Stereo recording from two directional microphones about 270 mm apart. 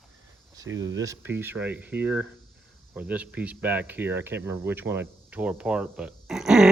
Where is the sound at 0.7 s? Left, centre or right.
Right.